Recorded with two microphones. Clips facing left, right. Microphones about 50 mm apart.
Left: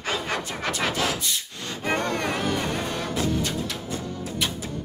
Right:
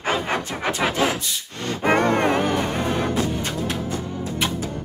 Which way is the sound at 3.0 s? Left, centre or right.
Right.